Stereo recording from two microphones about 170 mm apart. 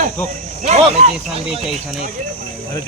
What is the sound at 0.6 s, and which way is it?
Speech, 40° right (ahead or behind).